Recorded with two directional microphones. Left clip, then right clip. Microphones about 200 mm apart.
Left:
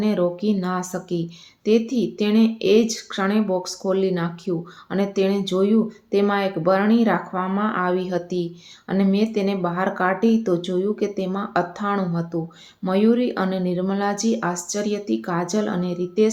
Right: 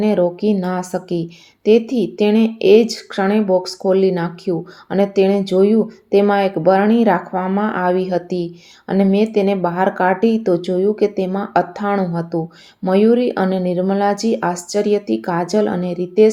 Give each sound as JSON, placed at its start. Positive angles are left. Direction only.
{"t": 0.0, "sound": "speech", "side_deg": -15}